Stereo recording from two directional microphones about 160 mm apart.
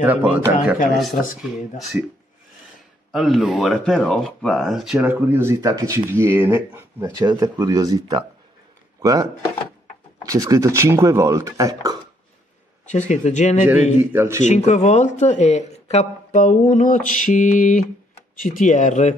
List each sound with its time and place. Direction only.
0.0 s speech: 10° right (ahead or behind)
0.9 s speech: centre (ahead or behind)
3.1 s speech: centre (ahead or behind)
5.3 s speech: 15° right (ahead or behind)
12.8 s speech: 45° left (ahead or behind)
13.9 s speech: 15° right (ahead or behind)
14.4 s speech: 50° left (ahead or behind)